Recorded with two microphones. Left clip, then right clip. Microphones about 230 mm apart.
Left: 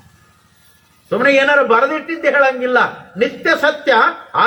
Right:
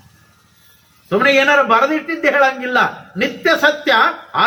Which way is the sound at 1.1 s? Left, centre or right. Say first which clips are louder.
Even; right.